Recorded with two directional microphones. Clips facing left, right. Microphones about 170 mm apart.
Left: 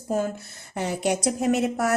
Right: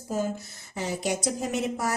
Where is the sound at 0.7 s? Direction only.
65° left (ahead or behind).